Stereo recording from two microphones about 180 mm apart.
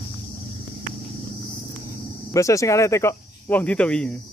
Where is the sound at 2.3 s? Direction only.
15° left (ahead or behind).